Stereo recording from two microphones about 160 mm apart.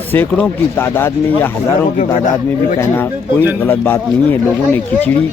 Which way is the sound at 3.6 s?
10° left (ahead or behind).